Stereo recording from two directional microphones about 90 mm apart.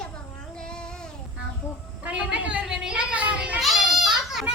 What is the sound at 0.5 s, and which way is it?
Child singing, 10° left (ahead or behind).